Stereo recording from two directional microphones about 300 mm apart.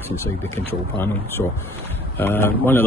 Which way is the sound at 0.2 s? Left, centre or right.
Centre.